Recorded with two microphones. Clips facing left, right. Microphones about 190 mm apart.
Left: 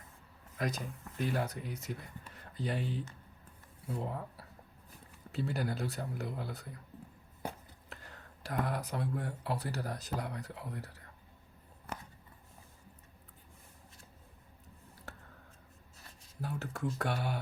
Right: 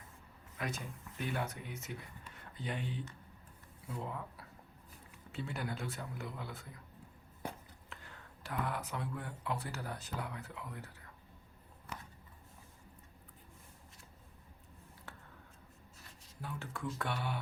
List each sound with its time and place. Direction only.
0.6 s speech: 40° left (ahead or behind)
7.9 s speech: 40° left (ahead or behind)
15.1 s tick: 40° left (ahead or behind)
16.4 s speech: 40° left (ahead or behind)